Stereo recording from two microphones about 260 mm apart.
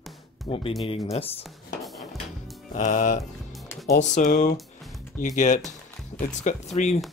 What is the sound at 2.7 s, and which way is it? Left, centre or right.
Speech, left.